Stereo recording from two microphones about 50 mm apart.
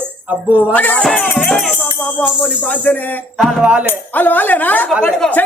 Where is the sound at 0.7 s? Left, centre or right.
Left.